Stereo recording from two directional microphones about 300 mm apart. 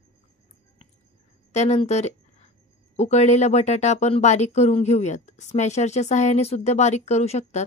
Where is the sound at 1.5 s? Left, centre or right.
Left.